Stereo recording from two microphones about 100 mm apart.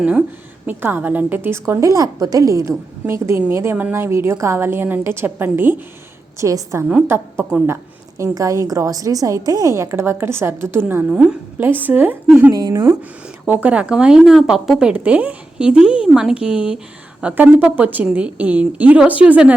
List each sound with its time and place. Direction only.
0.0 s a woman's voice: 10° right (ahead or behind)
6.4 s a woman's voice: 30° right (ahead or behind)
11.2 s a woman's voice: 5° right (ahead or behind)
11.6 s a woman's voice: 20° right (ahead or behind)
13.5 s speech: 15° right (ahead or behind)